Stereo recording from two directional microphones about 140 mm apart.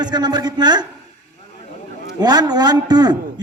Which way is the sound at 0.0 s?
30° right (ahead or behind).